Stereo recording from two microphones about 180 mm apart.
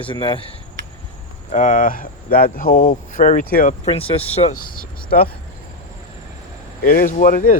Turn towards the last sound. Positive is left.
turn(degrees=50)  # may be behind; listen again after turning